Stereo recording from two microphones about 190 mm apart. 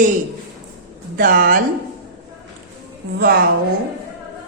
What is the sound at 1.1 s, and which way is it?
Speech, 50° right (ahead or behind).